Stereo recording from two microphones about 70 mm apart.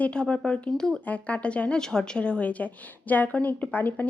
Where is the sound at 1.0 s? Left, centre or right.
Left.